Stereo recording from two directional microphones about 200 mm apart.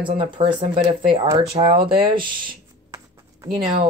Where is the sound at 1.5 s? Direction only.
25° right (ahead or behind).